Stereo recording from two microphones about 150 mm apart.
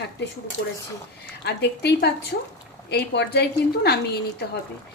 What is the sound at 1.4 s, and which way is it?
A woman's voice, 90° left.